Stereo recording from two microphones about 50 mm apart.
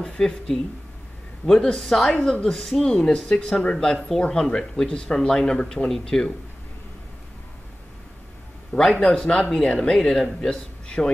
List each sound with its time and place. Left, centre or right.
0.0 s speech: centre
4.2 s speech: centre
9.0 s speech: centre